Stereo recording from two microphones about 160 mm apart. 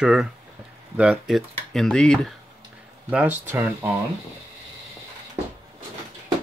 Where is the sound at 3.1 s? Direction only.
10° right (ahead or behind).